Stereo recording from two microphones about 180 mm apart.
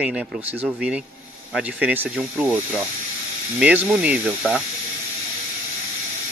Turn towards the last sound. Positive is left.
turn(degrees=-5)  # may be behind; listen again after turning